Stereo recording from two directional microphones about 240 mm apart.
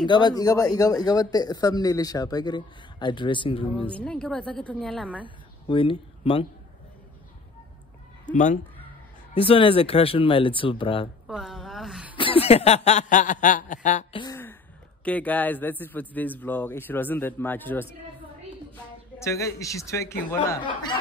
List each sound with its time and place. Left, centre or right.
0.0 s a man's voice: centre
3.8 s a woman's voice: centre
5.2 s speech: left
8.3 s speech: left
9.3 s chuckle: left
11.2 s a sound: centre
12.2 s chuckle: left
14.2 s a sound: centre
15.0 s a man's voice: centre
19.1 s a man's voice: centre
20.6 s chuckle: centre